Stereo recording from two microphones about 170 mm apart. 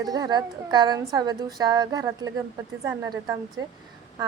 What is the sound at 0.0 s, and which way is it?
A woman's voice, 25° right (ahead or behind).